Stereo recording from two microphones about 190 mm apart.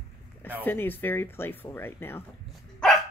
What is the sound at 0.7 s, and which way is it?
Speech, 10° left (ahead or behind).